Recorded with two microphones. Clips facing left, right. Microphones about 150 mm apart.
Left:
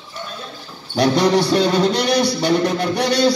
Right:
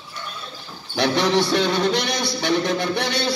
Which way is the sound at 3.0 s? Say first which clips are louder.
Left 8 dB; 40° left (ahead or behind).